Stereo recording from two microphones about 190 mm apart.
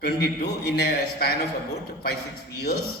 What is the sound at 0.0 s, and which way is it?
A man's voice, 60° left (ahead or behind).